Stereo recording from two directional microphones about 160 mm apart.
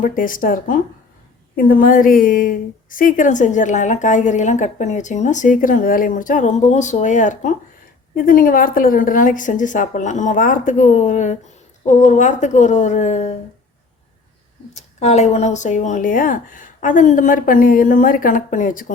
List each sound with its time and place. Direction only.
0.0 s a woman's voice: 60° left (ahead or behind)
8.1 s a woman's voice: 60° left (ahead or behind); by 13.3 s 45° left (ahead or behind)
14.8 s speech: 45° left (ahead or behind)